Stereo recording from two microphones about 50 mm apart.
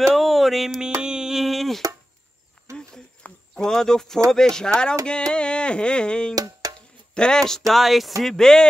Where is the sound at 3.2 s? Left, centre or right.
Left.